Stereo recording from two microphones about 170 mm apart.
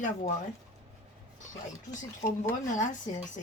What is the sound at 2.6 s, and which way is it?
Speech, 45° left (ahead or behind).